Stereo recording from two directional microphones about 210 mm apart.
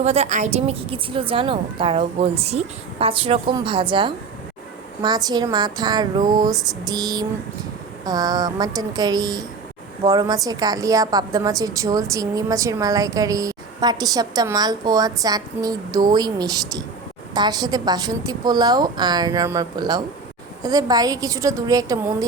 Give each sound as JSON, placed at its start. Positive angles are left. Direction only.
{"t": 0.0, "sound": "a woman's voice", "side_deg": -30}